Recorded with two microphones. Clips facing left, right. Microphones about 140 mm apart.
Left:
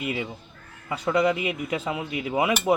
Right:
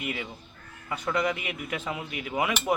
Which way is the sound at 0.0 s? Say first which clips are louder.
Left 5 dB; 25° left (ahead or behind).